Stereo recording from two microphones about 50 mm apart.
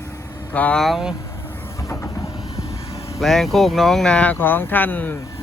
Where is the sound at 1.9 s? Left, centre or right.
Left.